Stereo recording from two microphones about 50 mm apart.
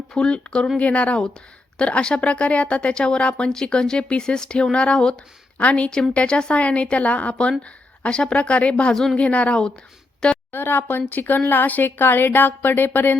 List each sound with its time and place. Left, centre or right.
0.1 s a woman's voice: centre
10.5 s speech: left